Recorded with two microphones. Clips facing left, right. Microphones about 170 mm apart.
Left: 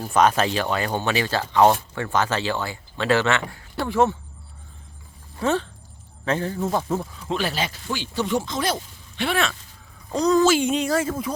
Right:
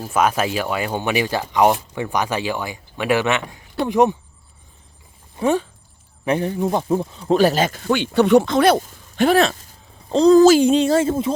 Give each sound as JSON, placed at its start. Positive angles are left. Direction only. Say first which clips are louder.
{"t": 0.0, "sound": "speech", "louder": "even", "side_deg": -5}
{"t": 5.4, "sound": "speech", "louder": "right 4 dB", "side_deg": -15}
{"t": 7.3, "sound": "speech", "louder": "right 10 dB", "side_deg": -40}
{"t": 7.9, "sound": "speech", "louder": "right 12 dB", "side_deg": -65}
{"t": 10.1, "sound": "a sound", "louder": "right 7 dB", "side_deg": -30}